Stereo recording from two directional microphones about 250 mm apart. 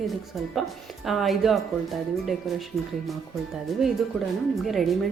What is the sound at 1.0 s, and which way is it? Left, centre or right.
Speech, centre.